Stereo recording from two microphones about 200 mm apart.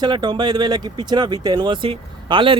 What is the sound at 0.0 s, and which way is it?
Speech, 20° right (ahead or behind).